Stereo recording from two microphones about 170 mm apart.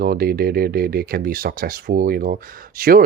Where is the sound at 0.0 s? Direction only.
60° right (ahead or behind).